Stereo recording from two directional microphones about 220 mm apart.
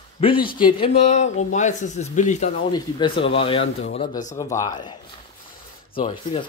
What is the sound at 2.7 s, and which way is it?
Speech, 20° left (ahead or behind).